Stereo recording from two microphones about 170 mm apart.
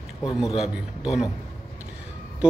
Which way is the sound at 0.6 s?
5° right (ahead or behind).